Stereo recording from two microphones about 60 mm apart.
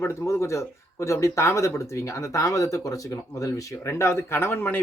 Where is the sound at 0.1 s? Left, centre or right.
Left.